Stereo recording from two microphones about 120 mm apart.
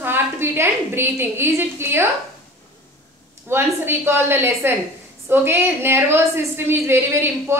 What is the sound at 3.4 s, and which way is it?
A woman's voice, 20° right (ahead or behind).